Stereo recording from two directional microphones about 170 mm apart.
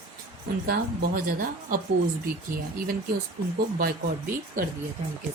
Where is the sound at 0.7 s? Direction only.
55° right (ahead or behind).